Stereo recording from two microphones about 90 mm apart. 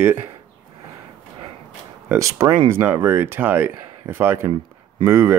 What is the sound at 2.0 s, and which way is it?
Speech, 35° right (ahead or behind).